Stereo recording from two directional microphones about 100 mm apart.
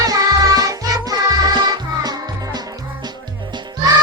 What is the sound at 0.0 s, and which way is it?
Music, 40° right (ahead or behind).